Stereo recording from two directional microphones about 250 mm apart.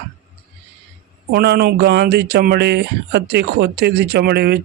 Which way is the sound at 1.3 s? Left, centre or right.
Right.